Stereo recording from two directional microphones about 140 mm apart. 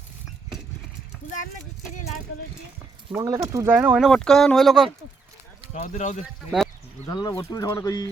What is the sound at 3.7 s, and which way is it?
Speech, 10° right (ahead or behind).